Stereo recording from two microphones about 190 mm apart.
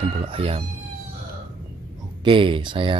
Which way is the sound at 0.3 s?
30° right (ahead or behind).